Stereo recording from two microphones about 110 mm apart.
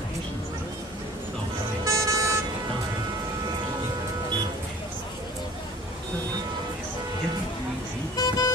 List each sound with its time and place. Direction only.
1.9 s vehicle: 30° right (ahead or behind)
8.2 s vehicle: 35° left (ahead or behind)